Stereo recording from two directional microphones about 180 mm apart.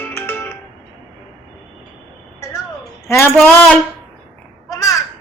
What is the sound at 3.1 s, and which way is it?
Speech, 10° left (ahead or behind).